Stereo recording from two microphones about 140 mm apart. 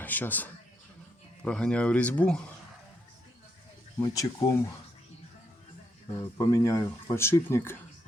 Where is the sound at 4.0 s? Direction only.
25° left (ahead or behind).